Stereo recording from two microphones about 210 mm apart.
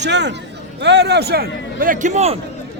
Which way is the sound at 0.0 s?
55° right (ahead or behind).